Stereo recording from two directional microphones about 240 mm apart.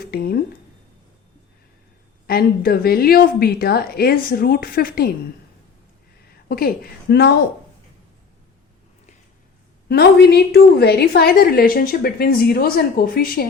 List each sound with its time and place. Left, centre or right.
0.0 s a sound: left
2.2 s a woman's voice: left
6.5 s a woman's voice: left
9.9 s a woman's voice: left